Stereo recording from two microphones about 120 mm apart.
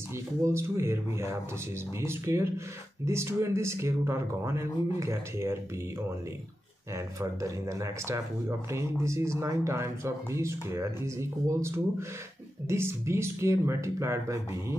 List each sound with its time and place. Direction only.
0.4 s speech: 25° right (ahead or behind)
7.0 s speech: 25° right (ahead or behind)